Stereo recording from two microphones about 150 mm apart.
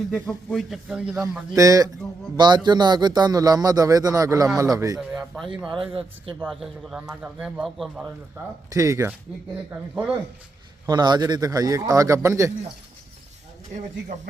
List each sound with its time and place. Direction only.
0.1 s a man's voice: centre (ahead or behind)
1.5 s a man's voice: 20° right (ahead or behind)
4.9 s a man's voice: centre (ahead or behind)
5.5 s a man's voice: 35° right (ahead or behind)
6.4 s a man's voice: centre (ahead or behind)
8.7 s a man's voice: 20° right (ahead or behind)
10.8 s a man's voice: 30° right (ahead or behind)